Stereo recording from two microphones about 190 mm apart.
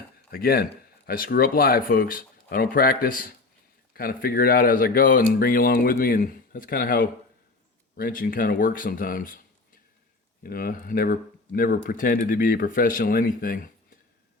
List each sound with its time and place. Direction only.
0.3 s speech: 50° left (ahead or behind)